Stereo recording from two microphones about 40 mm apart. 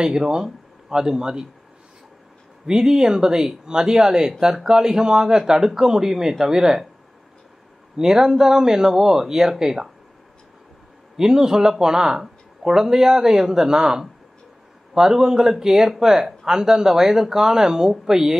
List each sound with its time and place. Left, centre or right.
0.0 s speech: centre
2.8 s speech: centre
8.0 s speech: centre
11.1 s speech: centre